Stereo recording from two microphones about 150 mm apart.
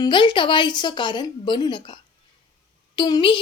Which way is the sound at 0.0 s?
30° left (ahead or behind).